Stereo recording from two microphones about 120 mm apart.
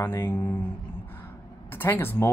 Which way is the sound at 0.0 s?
20° left (ahead or behind).